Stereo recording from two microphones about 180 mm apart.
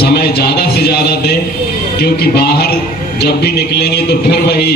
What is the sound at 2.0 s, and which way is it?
A man's voice, 65° left (ahead or behind).